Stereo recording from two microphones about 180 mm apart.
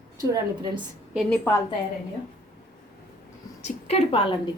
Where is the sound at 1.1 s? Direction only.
Centre (ahead or behind).